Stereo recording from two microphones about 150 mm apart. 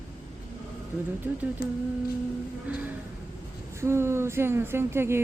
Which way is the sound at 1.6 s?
80° left.